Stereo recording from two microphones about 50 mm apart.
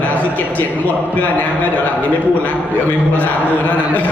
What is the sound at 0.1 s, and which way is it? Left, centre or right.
A man's voice, left.